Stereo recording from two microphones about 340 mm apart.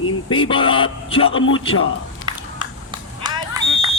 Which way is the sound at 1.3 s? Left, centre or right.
Left.